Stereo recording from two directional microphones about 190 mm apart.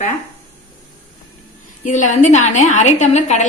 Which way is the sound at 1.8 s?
40° left (ahead or behind).